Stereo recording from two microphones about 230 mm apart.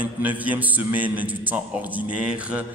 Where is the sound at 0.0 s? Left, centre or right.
Centre.